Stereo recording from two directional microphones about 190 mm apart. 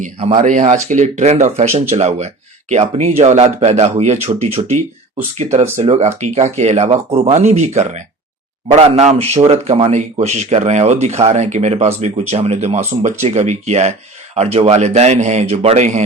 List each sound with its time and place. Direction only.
0.0 s speech: 30° right (ahead or behind)